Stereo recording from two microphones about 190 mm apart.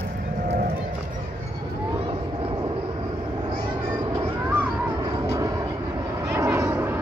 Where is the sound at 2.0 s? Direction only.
25° right (ahead or behind).